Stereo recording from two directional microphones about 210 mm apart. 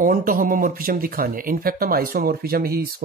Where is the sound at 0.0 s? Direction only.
40° right (ahead or behind).